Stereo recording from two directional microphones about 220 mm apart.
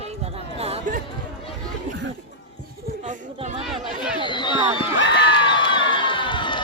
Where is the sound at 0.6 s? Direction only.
30° right (ahead or behind).